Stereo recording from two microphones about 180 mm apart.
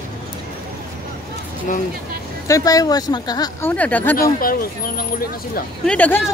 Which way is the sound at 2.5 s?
20° left (ahead or behind).